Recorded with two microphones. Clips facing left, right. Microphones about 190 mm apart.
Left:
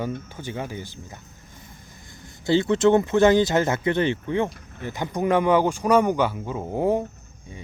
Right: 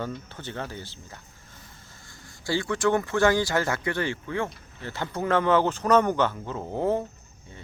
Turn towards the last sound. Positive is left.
turn(degrees=15)  # may be behind; listen again after turning